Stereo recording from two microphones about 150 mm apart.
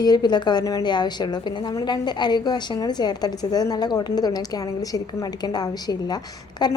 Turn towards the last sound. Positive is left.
turn(degrees=30)  # may be behind; listen again after turning